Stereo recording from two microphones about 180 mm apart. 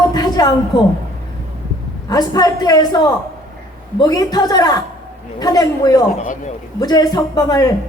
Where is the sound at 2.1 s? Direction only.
20° left (ahead or behind).